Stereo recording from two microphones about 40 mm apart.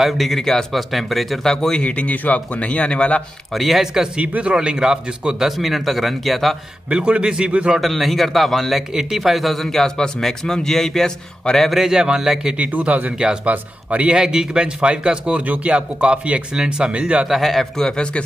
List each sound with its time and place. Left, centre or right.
0.0 s a man's voice: centre
1.5 s a man's voice: centre
1.8 s speech: left
3.5 s speech: centre
4.2 s a man's voice: right
4.6 s speech: centre
6.9 s speech: right
7.8 s a man's voice: centre
11.7 s speech: centre
12.5 s a man's voice: right
14.1 s speech: centre
15.4 s a man's voice: right
17.3 s a man's voice: centre
17.7 s a man's voice: centre